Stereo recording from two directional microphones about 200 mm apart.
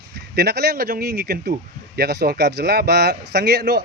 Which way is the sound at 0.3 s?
55° right (ahead or behind).